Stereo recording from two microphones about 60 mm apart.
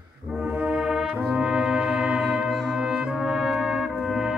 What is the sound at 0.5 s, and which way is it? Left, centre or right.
Brass instrument, centre.